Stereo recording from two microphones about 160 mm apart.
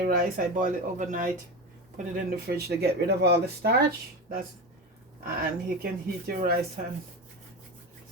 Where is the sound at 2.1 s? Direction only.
80° right.